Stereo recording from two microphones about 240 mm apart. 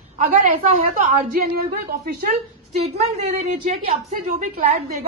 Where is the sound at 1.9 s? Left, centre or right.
Right.